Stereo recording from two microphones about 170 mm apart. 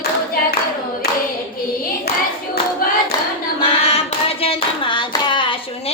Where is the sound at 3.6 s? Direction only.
35° left (ahead or behind).